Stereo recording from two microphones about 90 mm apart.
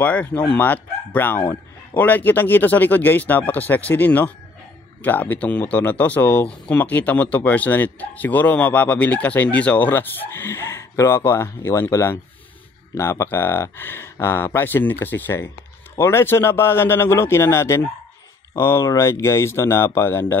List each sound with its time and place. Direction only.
0.0 s speech: 15° left (ahead or behind)